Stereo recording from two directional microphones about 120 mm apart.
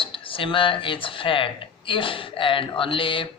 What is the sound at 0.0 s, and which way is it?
Speech, 45° left (ahead or behind).